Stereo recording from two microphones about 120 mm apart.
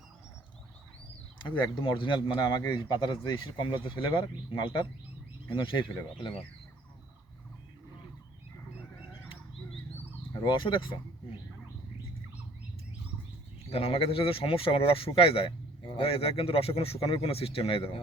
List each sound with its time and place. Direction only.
1.4 s a man's voice: 40° left (ahead or behind)
10.4 s a man's voice: 45° left (ahead or behind)
13.7 s a man's voice: 55° left (ahead or behind)